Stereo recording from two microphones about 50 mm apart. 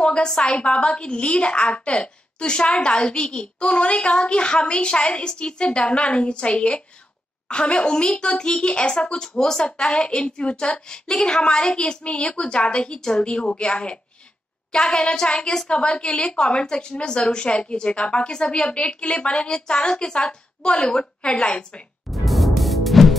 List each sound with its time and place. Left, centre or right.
0.0 s a sound: centre
0.4 s a woman's voice: left
22.1 s music: centre